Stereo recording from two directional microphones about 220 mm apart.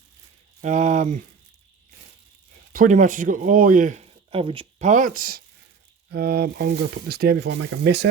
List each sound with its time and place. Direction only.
0.6 s speech: 35° right (ahead or behind)
2.7 s speech: 35° right (ahead or behind)